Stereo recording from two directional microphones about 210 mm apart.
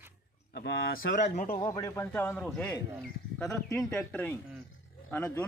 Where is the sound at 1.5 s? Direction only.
15° left (ahead or behind).